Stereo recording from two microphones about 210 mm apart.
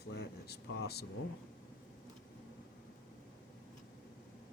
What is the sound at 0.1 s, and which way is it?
Air conditioning, 50° left (ahead or behind).